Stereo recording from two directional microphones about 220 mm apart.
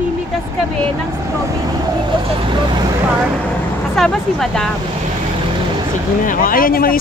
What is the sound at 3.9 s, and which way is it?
Speech, centre (ahead or behind).